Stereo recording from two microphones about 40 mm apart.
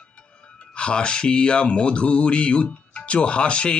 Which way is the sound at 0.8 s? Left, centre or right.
Left.